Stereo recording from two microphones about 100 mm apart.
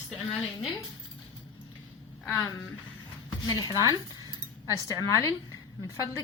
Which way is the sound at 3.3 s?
40° left (ahead or behind).